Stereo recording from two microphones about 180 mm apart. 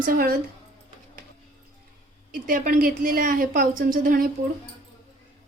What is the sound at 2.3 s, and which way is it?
A woman's voice, 50° right (ahead or behind).